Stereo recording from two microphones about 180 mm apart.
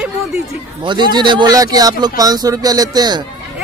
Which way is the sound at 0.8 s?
25° right (ahead or behind).